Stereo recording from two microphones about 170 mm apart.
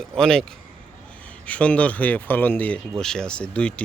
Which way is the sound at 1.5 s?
10° left (ahead or behind).